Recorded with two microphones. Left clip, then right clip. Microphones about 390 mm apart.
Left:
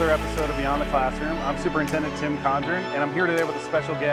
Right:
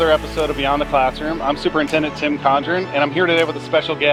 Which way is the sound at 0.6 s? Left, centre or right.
Left.